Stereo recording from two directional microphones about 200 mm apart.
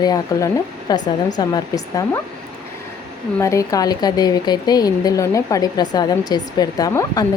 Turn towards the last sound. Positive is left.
turn(degrees=15)  # may be behind; listen again after turning